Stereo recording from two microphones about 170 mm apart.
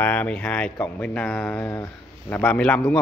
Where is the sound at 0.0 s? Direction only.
10° left (ahead or behind).